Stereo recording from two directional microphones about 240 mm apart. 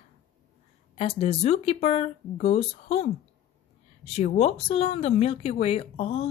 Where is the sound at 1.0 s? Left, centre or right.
Left.